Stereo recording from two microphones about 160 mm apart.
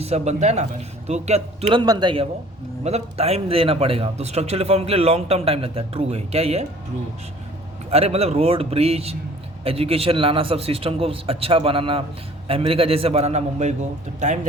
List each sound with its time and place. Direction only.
0.0 s speech: 45° right (ahead or behind)
1.8 s speech: 30° right (ahead or behind)
2.8 s a man's voice: 40° right (ahead or behind)
7.9 s a man's voice: 40° right (ahead or behind)